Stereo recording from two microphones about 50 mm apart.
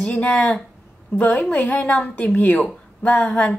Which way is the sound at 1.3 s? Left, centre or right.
Centre.